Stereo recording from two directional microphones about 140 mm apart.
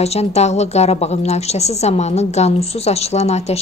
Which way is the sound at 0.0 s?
50° left (ahead or behind).